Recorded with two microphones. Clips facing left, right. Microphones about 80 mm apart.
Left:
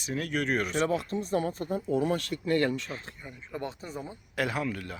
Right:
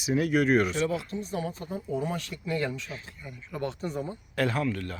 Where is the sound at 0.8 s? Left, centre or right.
Left.